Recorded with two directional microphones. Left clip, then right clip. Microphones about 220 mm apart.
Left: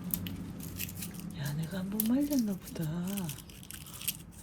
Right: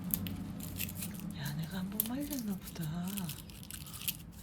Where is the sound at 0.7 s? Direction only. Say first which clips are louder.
Left 1 dB; 25° right (ahead or behind).